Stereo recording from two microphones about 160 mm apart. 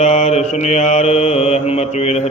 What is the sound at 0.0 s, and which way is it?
Mantra, 40° left (ahead or behind).